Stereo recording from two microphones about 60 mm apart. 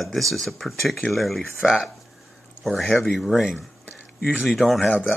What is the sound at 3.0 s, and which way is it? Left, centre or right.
Speech, centre.